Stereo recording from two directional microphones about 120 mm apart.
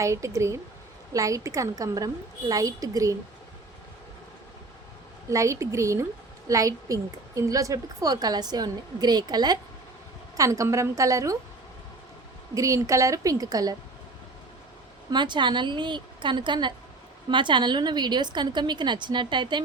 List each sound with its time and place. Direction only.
0.0 s a woman's voice: 25° right (ahead or behind)
5.3 s a woman's voice: 25° right (ahead or behind)
12.5 s a woman's voice: 25° right (ahead or behind)
15.1 s a woman's voice: 40° right (ahead or behind)